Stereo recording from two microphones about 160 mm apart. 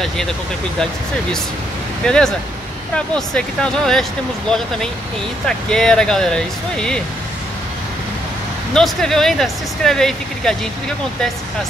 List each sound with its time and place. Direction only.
2.0 s speech: 5° left (ahead or behind)
5.7 s speech: 5° left (ahead or behind)
8.7 s speech: 5° left (ahead or behind)